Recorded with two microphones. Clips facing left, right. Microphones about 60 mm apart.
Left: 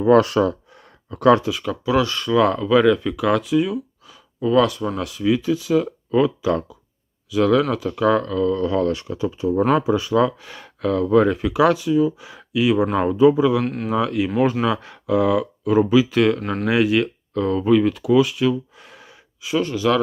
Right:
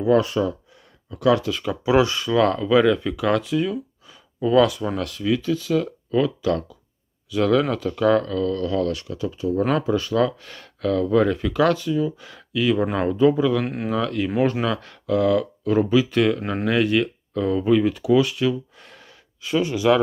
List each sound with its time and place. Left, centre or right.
0.1 s speech: left
1.1 s speech: left
1.8 s speech: right
2.1 s speech: centre
7.3 s speech: centre
8.6 s speech: left
9.6 s speech: centre
19.6 s speech: centre